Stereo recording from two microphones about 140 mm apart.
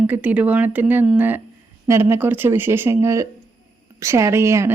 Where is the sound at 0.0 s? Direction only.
10° right (ahead or behind).